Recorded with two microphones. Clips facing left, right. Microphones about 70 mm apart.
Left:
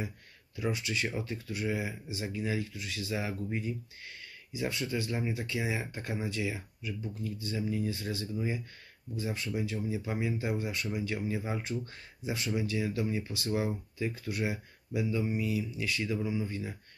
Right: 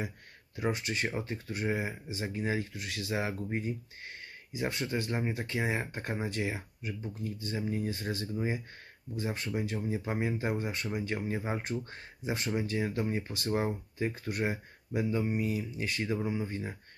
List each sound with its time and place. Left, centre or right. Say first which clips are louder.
0.6 s speech: right 1 dB; right
2.7 s speech: right 1 dB; right
3.4 s speech: right 1 dB; right